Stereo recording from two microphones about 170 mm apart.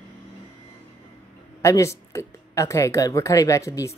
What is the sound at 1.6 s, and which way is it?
Speech, 20° left (ahead or behind).